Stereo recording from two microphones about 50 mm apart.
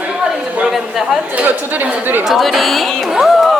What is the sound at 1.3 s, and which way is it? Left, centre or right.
Speech, right.